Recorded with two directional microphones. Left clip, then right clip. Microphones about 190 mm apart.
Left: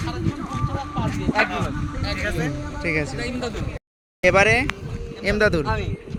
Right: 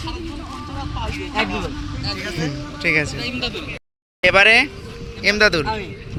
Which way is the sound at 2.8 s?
5° left (ahead or behind).